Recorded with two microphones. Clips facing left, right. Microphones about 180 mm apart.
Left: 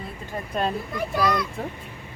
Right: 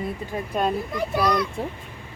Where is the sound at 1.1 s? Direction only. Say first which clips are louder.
Right 1 dB; centre (ahead or behind).